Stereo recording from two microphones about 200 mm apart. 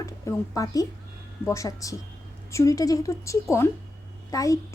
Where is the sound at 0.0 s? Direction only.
15° left (ahead or behind).